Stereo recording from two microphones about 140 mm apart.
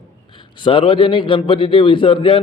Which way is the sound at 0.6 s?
35° left (ahead or behind).